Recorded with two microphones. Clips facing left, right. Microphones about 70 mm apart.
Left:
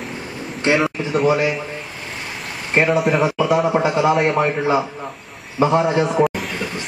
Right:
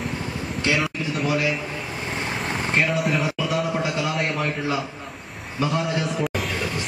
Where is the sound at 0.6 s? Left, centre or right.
Left.